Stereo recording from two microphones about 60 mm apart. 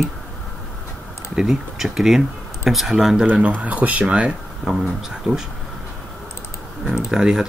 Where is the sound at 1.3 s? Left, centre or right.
Centre.